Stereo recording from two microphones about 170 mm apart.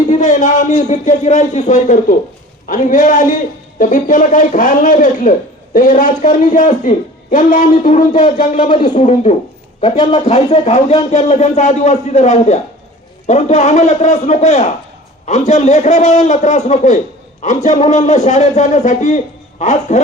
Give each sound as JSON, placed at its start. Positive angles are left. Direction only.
{"t": 0.1, "sound": "a man's voice", "side_deg": 50}